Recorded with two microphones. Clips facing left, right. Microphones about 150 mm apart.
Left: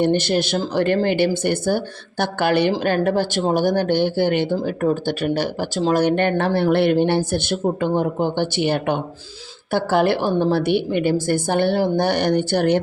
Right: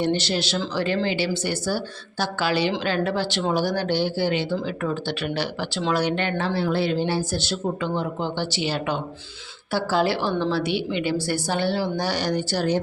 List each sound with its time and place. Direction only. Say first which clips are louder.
0.0 s a woman's voice: left 5 dB; 55° left (ahead or behind)